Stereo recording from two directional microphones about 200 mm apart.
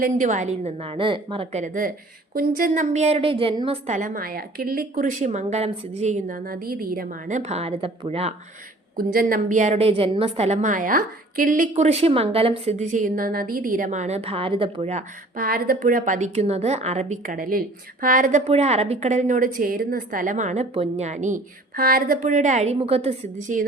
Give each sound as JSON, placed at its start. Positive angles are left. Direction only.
{"t": 0.0, "sound": "a woman's voice", "side_deg": -40}
{"t": 9.1, "sound": "a woman's voice", "side_deg": -40}